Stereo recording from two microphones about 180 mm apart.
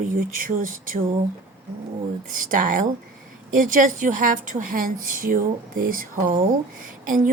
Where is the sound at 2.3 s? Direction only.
50° right (ahead or behind).